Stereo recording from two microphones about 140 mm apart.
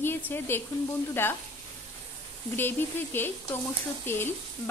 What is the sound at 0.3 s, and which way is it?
A woman's voice, 15° left (ahead or behind).